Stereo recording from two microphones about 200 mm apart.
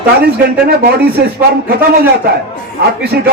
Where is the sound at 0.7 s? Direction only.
50° right (ahead or behind).